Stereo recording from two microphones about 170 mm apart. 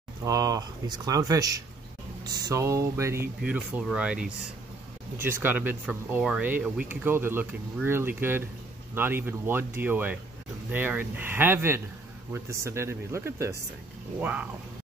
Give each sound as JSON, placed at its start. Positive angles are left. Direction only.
{"t": 0.2, "sound": "speech", "side_deg": -20}